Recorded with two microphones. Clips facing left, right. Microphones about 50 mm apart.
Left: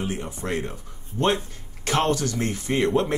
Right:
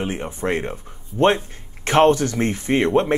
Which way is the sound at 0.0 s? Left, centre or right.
Right.